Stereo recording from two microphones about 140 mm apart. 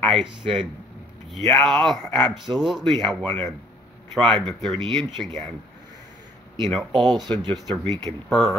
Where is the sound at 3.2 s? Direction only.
15° left (ahead or behind).